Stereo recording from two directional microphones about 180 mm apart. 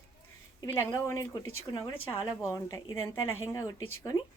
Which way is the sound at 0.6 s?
15° left (ahead or behind).